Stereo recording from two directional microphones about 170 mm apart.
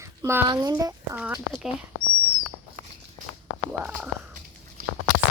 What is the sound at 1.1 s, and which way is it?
Speech, 5° right (ahead or behind).